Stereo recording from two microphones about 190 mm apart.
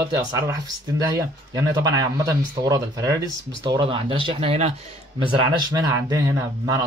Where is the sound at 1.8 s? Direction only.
20° right (ahead or behind).